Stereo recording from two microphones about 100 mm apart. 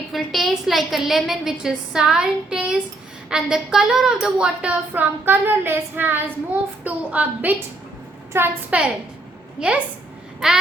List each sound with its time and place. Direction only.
0.1 s a woman's voice: centre (ahead or behind); by 7.5 s 15° right (ahead or behind)
8.3 s a woman's voice: 25° right (ahead or behind)
8.7 s a woman's voice: 15° right (ahead or behind)
10.4 s babbling: 5° right (ahead or behind)